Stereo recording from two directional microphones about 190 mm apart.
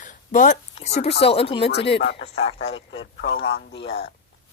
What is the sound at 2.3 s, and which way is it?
Speech, 35° left (ahead or behind).